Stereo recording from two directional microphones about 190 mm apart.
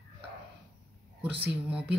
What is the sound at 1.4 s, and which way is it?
Speech, 5° right (ahead or behind).